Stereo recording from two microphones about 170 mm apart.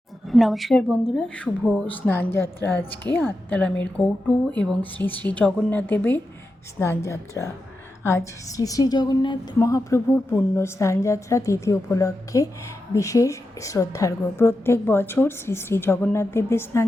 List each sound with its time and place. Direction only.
0.3 s a woman's voice: centre (ahead or behind)